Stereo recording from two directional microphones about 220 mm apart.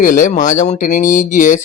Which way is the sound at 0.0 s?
35° left (ahead or behind).